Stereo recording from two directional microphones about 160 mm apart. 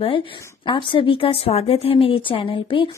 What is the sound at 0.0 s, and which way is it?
Speech, 35° left (ahead or behind).